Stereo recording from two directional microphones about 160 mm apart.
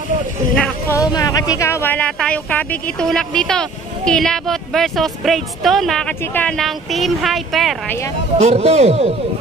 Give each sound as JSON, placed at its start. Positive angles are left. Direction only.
{"t": 0.9, "sound": "speech", "side_deg": 20}
{"t": 8.4, "sound": "speech", "side_deg": -40}